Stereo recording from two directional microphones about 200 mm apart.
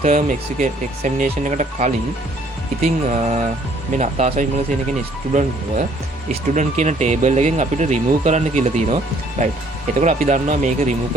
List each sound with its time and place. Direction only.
0.0 s speech: 40° right (ahead or behind)